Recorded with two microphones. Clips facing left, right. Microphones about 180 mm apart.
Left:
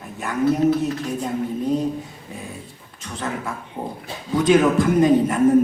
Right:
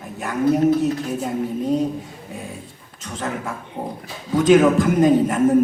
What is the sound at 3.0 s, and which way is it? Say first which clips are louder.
A man's voice: right 1 dB; 45° right (ahead or behind).